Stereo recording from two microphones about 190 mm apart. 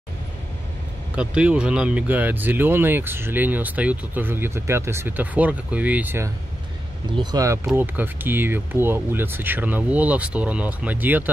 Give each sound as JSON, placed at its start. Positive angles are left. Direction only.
{"t": 1.1, "sound": "speech", "side_deg": -5}